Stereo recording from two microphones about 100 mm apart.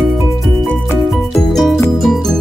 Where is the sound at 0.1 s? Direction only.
Centre (ahead or behind).